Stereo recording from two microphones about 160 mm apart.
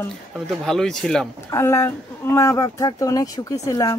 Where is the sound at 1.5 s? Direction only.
20° left (ahead or behind).